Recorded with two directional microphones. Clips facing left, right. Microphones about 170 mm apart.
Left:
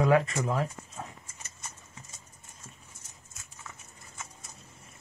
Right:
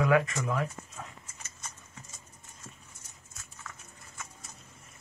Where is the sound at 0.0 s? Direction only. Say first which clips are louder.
Left 2 dB; 30° left (ahead or behind).